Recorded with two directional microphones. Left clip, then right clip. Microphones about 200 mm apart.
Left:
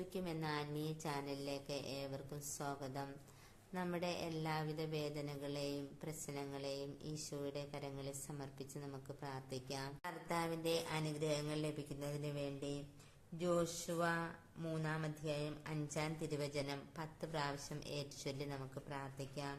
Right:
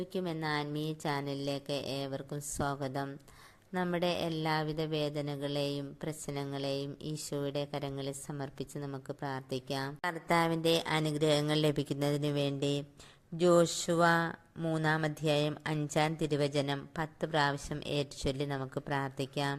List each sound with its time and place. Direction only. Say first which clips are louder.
0.1 s a woman's voice: right 9 dB; 30° right (ahead or behind)